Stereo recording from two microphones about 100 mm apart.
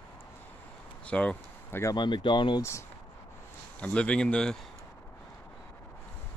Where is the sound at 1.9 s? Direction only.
50° left (ahead or behind).